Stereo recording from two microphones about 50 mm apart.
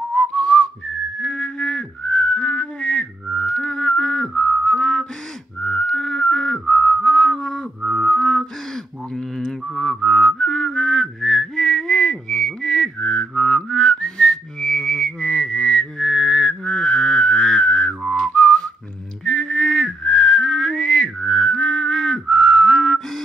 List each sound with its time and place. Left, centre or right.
0.1 s whistling: centre
5.6 s music: centre
9.1 s whistling: centre